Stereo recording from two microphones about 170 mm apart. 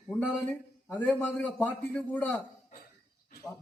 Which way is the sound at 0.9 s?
10° left (ahead or behind).